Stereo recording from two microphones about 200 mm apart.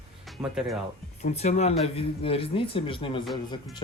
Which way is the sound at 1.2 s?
35° left (ahead or behind).